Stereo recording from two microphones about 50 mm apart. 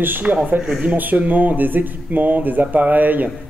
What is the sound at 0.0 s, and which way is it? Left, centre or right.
A man's voice, right.